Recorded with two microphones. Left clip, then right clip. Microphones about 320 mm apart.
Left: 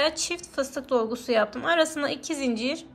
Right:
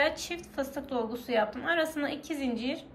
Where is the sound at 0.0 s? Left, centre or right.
Centre.